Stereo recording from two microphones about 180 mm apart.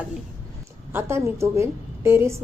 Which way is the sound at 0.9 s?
15° right (ahead or behind).